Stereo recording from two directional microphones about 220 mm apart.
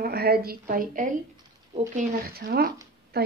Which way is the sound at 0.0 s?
45° right (ahead or behind).